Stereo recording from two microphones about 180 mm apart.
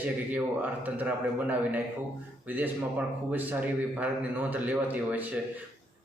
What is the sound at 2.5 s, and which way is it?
A man's voice, 10° right (ahead or behind).